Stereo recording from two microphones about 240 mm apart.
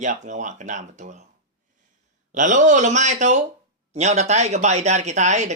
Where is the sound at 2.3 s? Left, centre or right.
Right.